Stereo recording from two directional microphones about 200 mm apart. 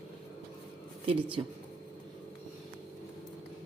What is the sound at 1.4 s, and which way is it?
Speech, 20° right (ahead or behind).